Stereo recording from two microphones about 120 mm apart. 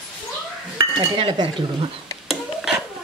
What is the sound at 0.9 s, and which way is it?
Dishes, 45° right (ahead or behind).